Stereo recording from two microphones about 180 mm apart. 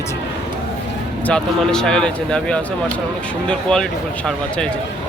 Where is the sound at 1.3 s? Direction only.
5° left (ahead or behind).